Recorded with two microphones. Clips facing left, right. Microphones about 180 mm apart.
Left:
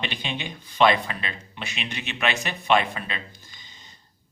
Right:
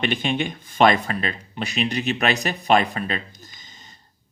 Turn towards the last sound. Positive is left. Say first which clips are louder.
# right 2 dB
turn(degrees=-45)  # may be behind; listen again after turning